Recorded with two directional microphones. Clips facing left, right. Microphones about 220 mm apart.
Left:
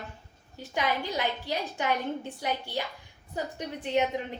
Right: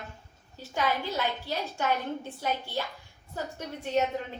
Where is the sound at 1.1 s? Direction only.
15° left (ahead or behind).